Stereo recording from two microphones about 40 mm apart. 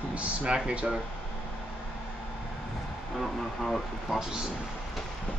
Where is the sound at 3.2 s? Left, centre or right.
Centre.